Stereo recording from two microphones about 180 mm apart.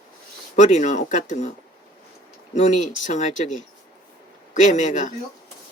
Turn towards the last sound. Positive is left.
turn(degrees=45)  # may be behind; listen again after turning